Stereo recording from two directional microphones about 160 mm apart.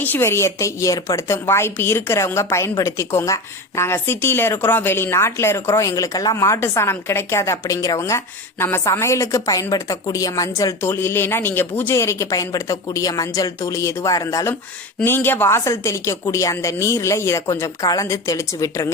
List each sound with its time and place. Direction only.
0.0 s a woman's voice: 15° left (ahead or behind)